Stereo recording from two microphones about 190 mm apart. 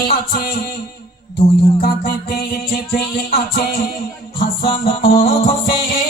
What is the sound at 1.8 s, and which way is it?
Music, 50° left (ahead or behind).